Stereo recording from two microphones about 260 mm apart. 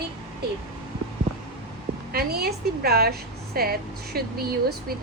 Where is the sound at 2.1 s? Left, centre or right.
Right.